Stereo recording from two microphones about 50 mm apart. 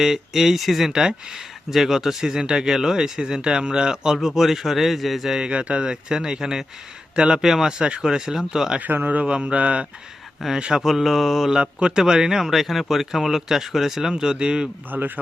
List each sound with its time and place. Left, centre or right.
0.0 s speech: centre
5.5 s speech: right
7.2 s mantra: centre
7.4 s speech: centre
7.8 s speech: centre
8.8 s speech: right
9.2 s mantra: right
10.6 s mantra: centre
11.5 s speech: centre
14.8 s speech: right